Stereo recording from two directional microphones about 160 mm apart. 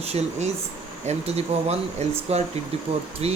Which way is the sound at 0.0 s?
40° right (ahead or behind).